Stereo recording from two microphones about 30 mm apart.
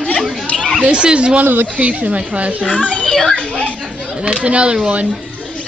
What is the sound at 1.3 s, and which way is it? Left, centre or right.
Speech, right.